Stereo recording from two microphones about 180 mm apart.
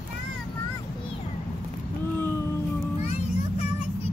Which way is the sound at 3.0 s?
40° left (ahead or behind).